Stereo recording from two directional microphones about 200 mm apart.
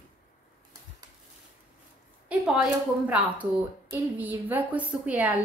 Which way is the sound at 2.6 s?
5° right (ahead or behind).